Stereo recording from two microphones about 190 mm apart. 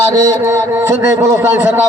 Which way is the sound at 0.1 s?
20° right (ahead or behind).